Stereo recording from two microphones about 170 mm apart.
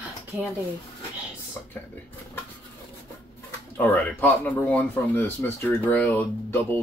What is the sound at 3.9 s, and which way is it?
Speech, 10° left (ahead or behind).